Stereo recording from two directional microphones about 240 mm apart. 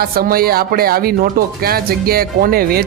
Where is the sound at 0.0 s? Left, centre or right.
Right.